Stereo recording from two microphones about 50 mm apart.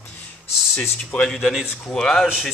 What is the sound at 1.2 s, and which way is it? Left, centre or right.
Speech, centre.